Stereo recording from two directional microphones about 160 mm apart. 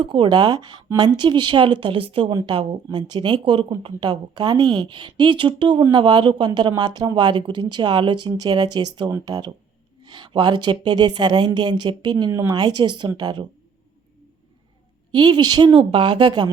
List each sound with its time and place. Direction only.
0.0 s speech: 30° right (ahead or behind); by 12.5 s 15° right (ahead or behind)
12.5 s speech: 25° right (ahead or behind)
15.1 s speech: 25° right (ahead or behind)